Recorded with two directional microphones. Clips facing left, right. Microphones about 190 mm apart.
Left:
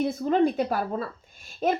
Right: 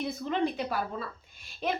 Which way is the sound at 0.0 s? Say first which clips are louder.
Left 7 dB; 45° left (ahead or behind).